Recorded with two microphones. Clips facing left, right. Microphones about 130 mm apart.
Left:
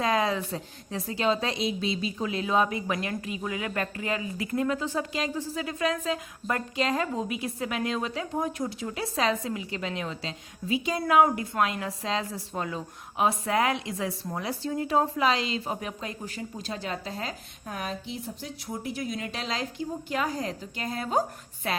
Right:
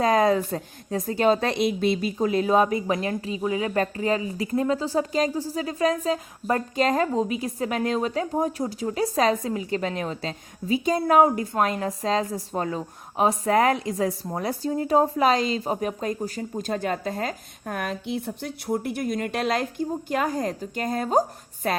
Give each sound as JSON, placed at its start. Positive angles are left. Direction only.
{"t": 0.0, "sound": "speech", "side_deg": -45}
{"t": 2.8, "sound": "a woman's voice", "side_deg": -30}